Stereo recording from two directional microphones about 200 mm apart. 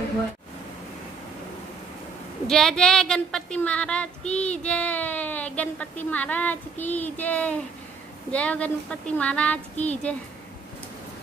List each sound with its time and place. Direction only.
2.4 s speech: 5° left (ahead or behind)